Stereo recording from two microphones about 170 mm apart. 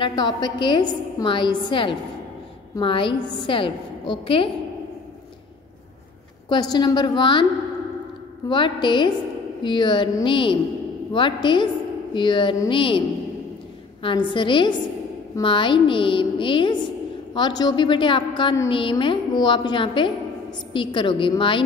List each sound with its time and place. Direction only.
0.0 s a woman's voice: 25° left (ahead or behind)
6.5 s a woman's voice: 25° left (ahead or behind)
8.5 s a woman's voice: 30° left (ahead or behind)
14.0 s a woman's voice: 30° left (ahead or behind)